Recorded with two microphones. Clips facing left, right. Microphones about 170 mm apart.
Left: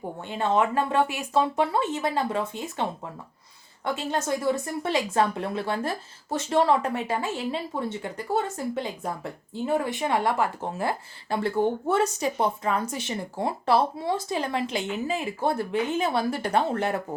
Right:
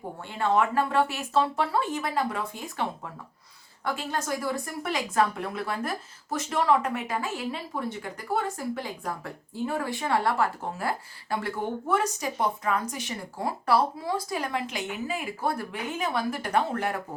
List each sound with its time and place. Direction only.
0.3 s speech: 20° left (ahead or behind)
3.8 s speech: 25° left (ahead or behind)